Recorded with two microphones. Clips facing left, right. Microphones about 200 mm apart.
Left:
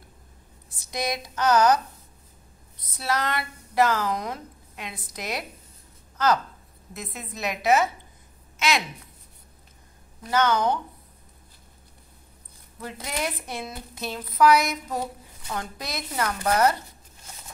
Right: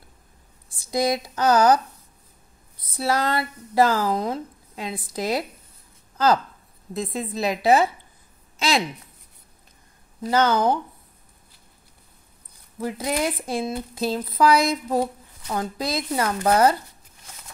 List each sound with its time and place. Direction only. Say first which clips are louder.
0.9 s speech: right 6 dB; 30° right (ahead or behind)
3.0 s a woman's voice: right 4 dB; 30° right (ahead or behind)
13.0 s speech: right 5 dB; 25° right (ahead or behind)